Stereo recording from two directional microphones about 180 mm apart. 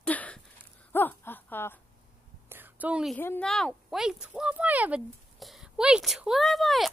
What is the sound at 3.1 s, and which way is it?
Speech, 10° left (ahead or behind).